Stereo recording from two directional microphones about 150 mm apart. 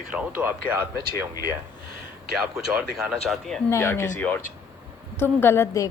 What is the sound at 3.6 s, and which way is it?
A woman's voice, 20° left (ahead or behind).